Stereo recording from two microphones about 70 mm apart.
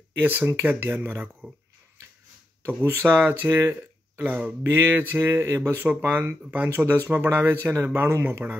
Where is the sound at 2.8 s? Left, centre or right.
Right.